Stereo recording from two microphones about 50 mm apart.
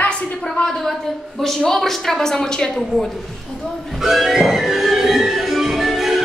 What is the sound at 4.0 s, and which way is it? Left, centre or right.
Music, centre.